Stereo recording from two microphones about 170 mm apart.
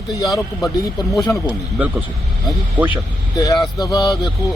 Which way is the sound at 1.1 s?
20° left (ahead or behind).